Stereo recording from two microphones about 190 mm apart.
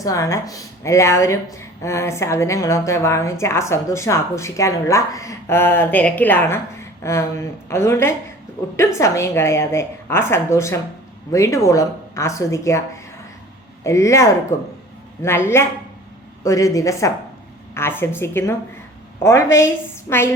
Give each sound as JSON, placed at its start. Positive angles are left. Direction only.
{"t": 0.0, "sound": "speech", "side_deg": 15}